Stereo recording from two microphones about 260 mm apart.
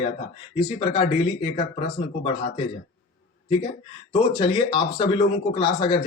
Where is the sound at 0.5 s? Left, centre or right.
Centre.